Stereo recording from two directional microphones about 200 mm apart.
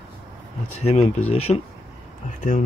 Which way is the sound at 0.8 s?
30° left (ahead or behind).